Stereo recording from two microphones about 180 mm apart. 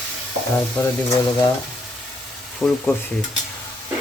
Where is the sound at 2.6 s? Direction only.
Centre (ahead or behind).